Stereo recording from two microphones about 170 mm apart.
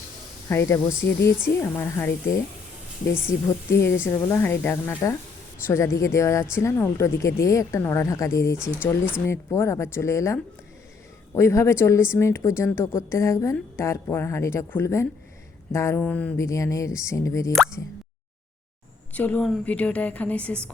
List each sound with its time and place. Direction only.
0.4 s speech: 15° left (ahead or behind)
3.2 s speech: 15° left (ahead or behind)
19.1 s speech: 10° left (ahead or behind)